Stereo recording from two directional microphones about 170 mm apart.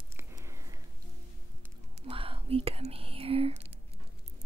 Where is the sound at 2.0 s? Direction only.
35° right (ahead or behind).